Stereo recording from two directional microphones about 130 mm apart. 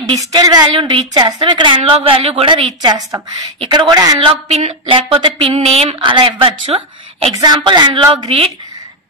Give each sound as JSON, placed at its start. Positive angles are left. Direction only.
{"t": 0.2, "sound": "a woman's voice", "side_deg": -30}
{"t": 2.8, "sound": "a woman's voice", "side_deg": -30}
{"t": 4.5, "sound": "a woman's voice", "side_deg": -55}
{"t": 7.3, "sound": "a woman's voice", "side_deg": -35}
{"t": 8.3, "sound": "a woman's voice", "side_deg": -50}